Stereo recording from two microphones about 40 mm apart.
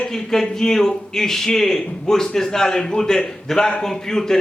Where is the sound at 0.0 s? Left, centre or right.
Centre.